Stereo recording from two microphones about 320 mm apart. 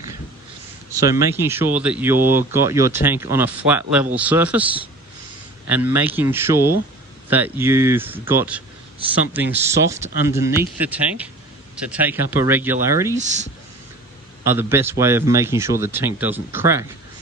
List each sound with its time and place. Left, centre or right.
0.9 s a man's voice: centre
13.1 s speech: right
14.4 s a man's voice: centre